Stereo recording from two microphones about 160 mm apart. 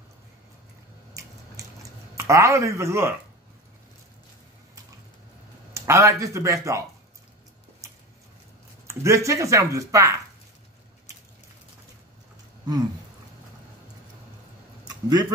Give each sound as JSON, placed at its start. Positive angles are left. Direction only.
{"t": 1.8, "sound": "a sound", "side_deg": -20}
{"t": 5.7, "sound": "speech", "side_deg": -20}
{"t": 8.8, "sound": "speech", "side_deg": -20}
{"t": 15.0, "sound": "speech", "side_deg": -25}